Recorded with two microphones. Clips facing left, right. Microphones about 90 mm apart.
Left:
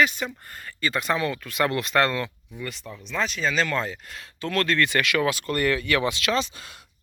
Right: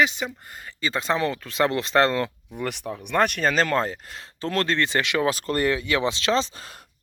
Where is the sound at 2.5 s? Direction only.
70° right (ahead or behind); by 5.2 s 25° right (ahead or behind).